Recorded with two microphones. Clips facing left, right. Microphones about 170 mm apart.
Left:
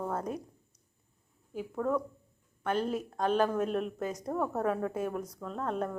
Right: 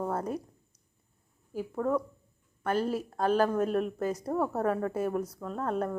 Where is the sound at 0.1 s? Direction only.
5° right (ahead or behind).